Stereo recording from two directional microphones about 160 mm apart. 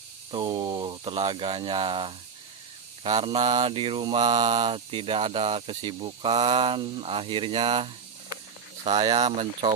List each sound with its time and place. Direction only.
0.3 s speech: 25° right (ahead or behind); by 9.0 s 40° right (ahead or behind)
9.0 s speech: 30° right (ahead or behind)